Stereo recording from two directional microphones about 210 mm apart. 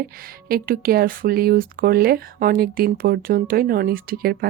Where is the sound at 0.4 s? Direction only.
45° right (ahead or behind).